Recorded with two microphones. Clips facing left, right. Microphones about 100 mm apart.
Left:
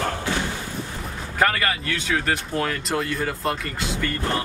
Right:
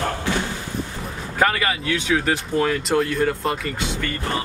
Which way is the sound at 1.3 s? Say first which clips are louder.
Right 1 dB; 10° right (ahead or behind).